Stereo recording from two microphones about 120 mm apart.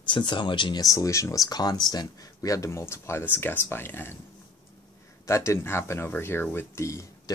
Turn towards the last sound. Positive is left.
turn(degrees=25)  # may be behind; listen again after turning